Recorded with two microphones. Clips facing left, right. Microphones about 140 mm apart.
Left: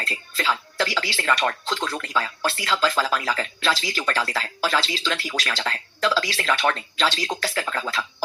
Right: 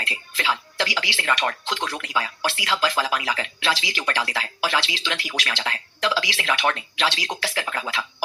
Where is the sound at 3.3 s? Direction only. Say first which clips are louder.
Left 1 dB; 40° left (ahead or behind).